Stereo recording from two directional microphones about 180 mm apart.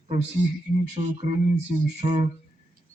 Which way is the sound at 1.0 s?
30° right (ahead or behind).